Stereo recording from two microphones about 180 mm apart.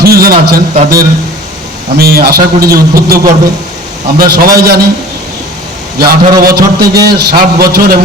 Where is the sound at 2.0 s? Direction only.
55° right (ahead or behind).